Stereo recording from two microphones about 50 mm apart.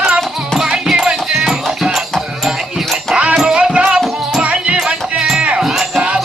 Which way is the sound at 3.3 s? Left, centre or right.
Centre.